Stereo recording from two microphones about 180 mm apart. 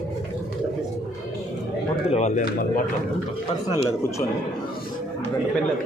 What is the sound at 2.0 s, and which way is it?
Speech, 35° left (ahead or behind).